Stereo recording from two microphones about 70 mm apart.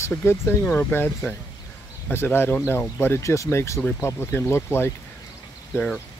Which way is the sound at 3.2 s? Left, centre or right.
Left.